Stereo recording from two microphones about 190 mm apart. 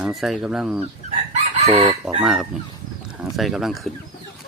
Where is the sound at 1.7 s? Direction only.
30° right (ahead or behind).